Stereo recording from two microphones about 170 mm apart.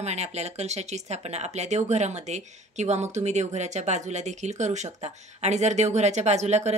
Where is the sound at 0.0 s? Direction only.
40° right (ahead or behind).